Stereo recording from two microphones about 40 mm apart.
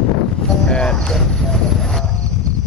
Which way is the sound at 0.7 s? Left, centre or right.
Left.